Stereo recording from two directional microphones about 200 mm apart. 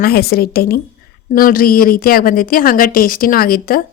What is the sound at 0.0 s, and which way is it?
A woman's voice, 50° left (ahead or behind).